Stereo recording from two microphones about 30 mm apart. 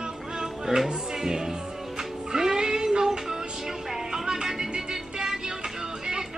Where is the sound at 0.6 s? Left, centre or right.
Centre.